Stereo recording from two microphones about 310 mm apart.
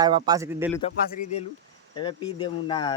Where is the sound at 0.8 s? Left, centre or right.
Left.